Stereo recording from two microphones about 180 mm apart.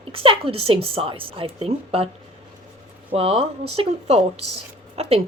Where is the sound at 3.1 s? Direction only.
30° right (ahead or behind).